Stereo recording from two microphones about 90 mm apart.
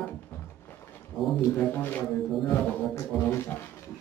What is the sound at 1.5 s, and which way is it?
Speech, 20° left (ahead or behind).